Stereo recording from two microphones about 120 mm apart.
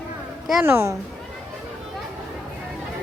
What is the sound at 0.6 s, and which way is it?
Speech, 20° right (ahead or behind).